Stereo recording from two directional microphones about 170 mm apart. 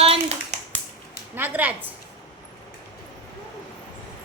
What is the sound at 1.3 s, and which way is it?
Speech, 10° right (ahead or behind).